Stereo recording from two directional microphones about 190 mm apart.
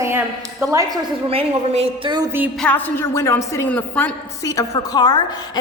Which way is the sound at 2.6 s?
10° left (ahead or behind).